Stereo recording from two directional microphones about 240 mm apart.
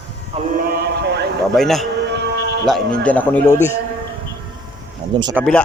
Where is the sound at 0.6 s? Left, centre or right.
Right.